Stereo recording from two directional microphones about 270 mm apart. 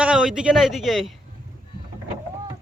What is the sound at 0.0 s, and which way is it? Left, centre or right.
Speech, centre.